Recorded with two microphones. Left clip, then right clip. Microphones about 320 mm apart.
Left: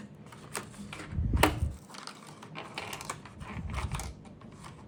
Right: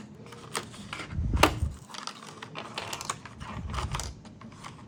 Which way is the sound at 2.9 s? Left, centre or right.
Centre.